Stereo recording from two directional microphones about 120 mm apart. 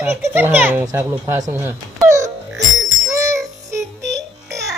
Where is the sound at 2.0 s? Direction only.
25° right (ahead or behind).